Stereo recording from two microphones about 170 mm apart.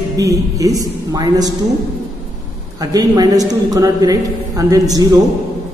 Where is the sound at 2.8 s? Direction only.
20° right (ahead or behind).